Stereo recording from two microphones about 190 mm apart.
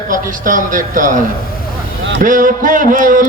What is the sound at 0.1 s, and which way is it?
Speech, 45° right (ahead or behind).